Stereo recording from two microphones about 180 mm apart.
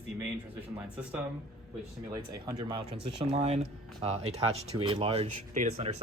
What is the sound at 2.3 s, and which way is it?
Speech, 20° right (ahead or behind).